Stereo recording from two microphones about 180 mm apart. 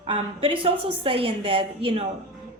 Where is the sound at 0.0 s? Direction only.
30° right (ahead or behind).